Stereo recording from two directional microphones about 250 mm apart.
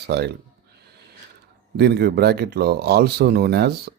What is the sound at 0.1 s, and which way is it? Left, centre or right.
Speech, right.